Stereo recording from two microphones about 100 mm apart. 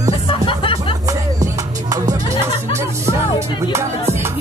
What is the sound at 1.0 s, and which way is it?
Music, 35° right (ahead or behind).